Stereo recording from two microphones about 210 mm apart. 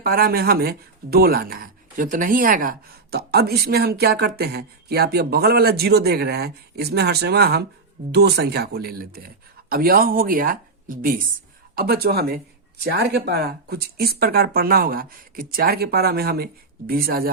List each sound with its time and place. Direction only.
0.0 s speech: 45° right (ahead or behind)